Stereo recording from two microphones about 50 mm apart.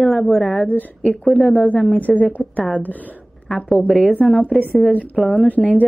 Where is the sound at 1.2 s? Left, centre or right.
Left.